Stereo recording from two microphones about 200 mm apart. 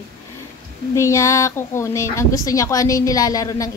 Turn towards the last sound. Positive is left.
turn(degrees=15)  # may be behind; listen again after turning